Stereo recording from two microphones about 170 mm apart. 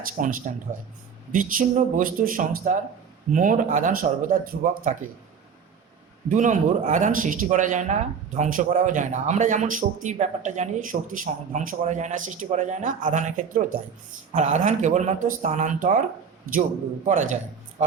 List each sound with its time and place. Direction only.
0.2 s a man's voice: 50° right (ahead or behind)
6.2 s a man's voice: 45° right (ahead or behind)
17.1 s a man's voice: 45° right (ahead or behind)
17.8 s music: 40° right (ahead or behind)